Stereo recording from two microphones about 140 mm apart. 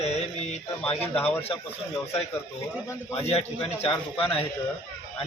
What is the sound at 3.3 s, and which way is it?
A man's voice, 45° left (ahead or behind).